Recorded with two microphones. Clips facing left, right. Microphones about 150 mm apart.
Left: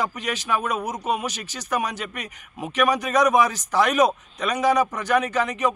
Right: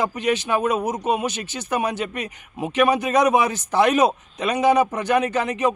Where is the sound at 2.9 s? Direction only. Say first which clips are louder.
Right 1 dB; 30° right (ahead or behind).